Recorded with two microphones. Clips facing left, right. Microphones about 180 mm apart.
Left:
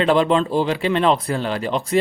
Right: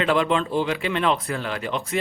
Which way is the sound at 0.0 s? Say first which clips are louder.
Left 5 dB; 35° left (ahead or behind).